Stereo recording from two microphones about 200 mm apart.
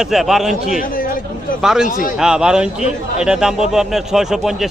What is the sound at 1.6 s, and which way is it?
A man's voice, 5° right (ahead or behind).